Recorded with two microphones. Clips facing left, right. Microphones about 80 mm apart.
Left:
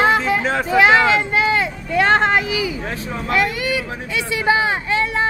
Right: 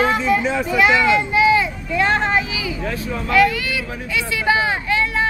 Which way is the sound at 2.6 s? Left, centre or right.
Left.